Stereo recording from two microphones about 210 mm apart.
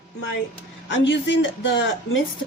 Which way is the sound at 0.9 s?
60° left (ahead or behind).